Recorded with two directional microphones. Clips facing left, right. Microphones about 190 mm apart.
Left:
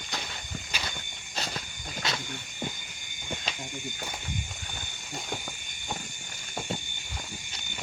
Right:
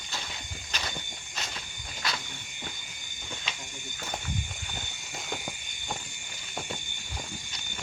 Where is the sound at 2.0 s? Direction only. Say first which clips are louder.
Left 1 dB; 25° left (ahead or behind).